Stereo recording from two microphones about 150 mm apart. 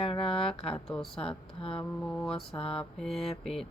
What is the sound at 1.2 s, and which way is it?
Speech, 35° left (ahead or behind).